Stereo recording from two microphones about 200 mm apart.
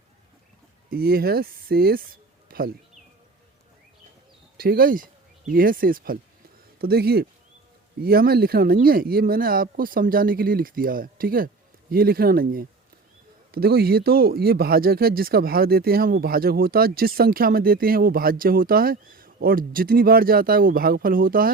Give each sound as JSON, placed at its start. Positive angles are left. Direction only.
{"t": 0.9, "sound": "speech", "side_deg": -50}
{"t": 2.5, "sound": "bird", "side_deg": -50}
{"t": 4.5, "sound": "speech", "side_deg": -45}